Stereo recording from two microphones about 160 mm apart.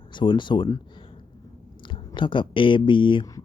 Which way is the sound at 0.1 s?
30° left (ahead or behind).